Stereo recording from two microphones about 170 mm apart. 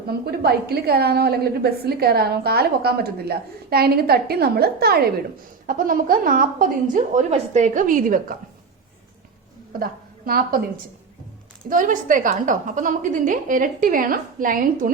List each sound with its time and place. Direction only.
0.1 s a woman's voice: 70° right (ahead or behind)
5.6 s a woman's voice: 55° right (ahead or behind)
9.7 s a woman's voice: 60° right (ahead or behind)
11.7 s a woman's voice: 50° right (ahead or behind)